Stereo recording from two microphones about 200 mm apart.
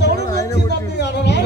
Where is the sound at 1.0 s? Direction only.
55° left (ahead or behind).